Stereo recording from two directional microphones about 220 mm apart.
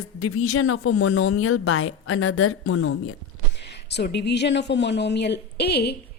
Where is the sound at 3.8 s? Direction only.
50° left (ahead or behind).